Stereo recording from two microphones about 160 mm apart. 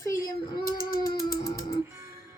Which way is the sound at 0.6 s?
60° left (ahead or behind).